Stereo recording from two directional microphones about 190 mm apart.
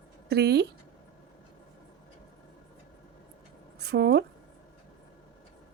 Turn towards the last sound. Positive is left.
turn(degrees=-60)  # may be behind; listen again after turning